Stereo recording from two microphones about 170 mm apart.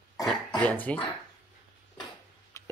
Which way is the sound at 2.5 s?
15° left (ahead or behind).